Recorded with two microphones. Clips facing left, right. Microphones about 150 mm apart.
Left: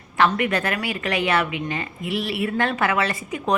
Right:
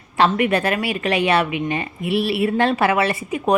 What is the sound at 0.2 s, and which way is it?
A woman's voice, 25° right (ahead or behind).